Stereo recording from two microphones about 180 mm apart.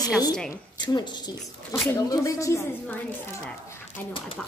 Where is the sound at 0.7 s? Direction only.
25° left (ahead or behind).